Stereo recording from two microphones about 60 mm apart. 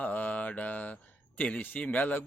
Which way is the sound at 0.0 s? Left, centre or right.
Left.